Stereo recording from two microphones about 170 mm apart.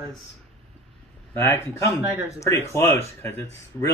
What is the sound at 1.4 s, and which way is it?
Speech, 15° left (ahead or behind).